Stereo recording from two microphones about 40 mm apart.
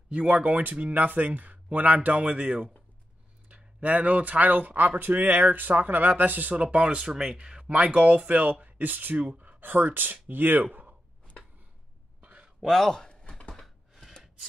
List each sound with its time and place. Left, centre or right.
0.1 s speech: right
6.5 s speech: right
7.0 s speech: centre
7.7 s speech: right
11.4 s a sound: left
12.2 s a sound: right
12.6 s speech: centre
13.1 s typing: left